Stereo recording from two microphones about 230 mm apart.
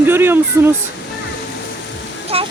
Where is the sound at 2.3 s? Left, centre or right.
Right.